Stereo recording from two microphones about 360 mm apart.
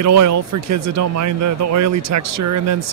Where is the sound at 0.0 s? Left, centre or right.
Right.